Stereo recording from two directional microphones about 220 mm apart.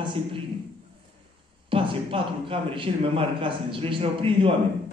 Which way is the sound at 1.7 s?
25° right (ahead or behind).